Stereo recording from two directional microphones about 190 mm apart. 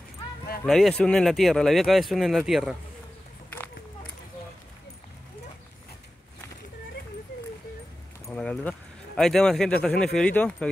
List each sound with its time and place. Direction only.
0.7 s speech: centre (ahead or behind)
3.4 s a sound: 10° left (ahead or behind)
8.4 s speech: 5° left (ahead or behind)